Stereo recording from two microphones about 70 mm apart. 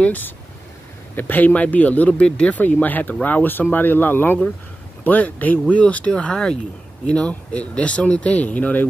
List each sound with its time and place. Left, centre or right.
0.0 s speech: left